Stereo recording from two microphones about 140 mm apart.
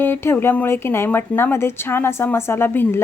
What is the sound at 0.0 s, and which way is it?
Speech, 15° left (ahead or behind).